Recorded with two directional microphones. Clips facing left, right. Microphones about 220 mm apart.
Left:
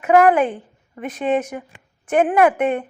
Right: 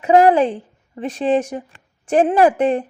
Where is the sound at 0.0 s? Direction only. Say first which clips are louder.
Right 2 dB; 30° right (ahead or behind).